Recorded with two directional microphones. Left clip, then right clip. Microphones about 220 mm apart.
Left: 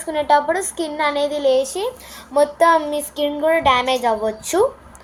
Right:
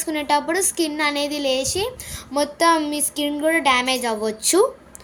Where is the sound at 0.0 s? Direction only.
65° right (ahead or behind).